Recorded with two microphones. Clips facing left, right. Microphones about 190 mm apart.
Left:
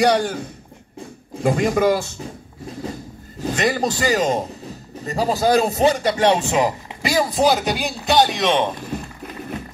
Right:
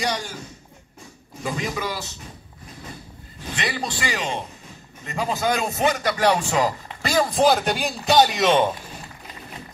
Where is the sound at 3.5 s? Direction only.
45° left (ahead or behind); by 8.7 s 5° right (ahead or behind).